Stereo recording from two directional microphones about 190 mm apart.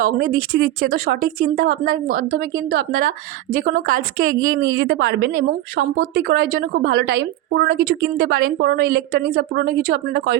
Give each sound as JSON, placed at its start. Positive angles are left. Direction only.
{"t": 0.0, "sound": "a woman's voice", "side_deg": -50}
{"t": 4.8, "sound": "a woman's voice", "side_deg": -60}